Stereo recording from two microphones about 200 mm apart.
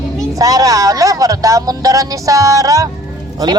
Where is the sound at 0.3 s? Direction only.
15° right (ahead or behind).